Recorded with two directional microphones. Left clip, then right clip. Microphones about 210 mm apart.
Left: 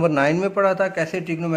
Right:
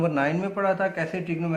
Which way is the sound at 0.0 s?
50° left (ahead or behind).